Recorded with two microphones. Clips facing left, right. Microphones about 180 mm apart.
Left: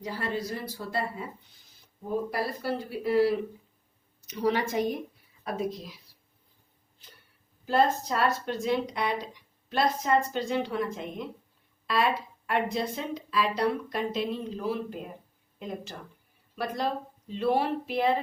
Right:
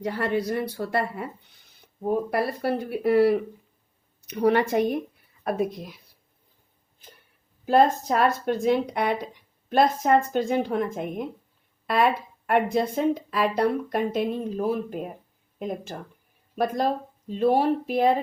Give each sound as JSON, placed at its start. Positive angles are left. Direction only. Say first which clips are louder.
{"t": 0.0, "sound": "a woman's voice", "louder": "right 7 dB", "side_deg": -60}
{"t": 7.6, "sound": "a woman's voice", "louder": "right 5 dB", "side_deg": -50}